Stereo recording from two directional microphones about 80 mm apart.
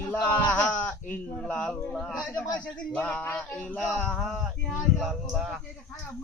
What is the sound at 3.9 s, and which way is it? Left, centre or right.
Speech, centre.